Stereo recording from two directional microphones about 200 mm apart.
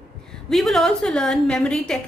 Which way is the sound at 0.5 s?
Centre (ahead or behind).